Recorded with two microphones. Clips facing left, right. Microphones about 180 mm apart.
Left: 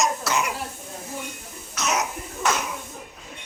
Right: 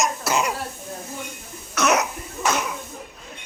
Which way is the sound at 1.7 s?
60° right (ahead or behind).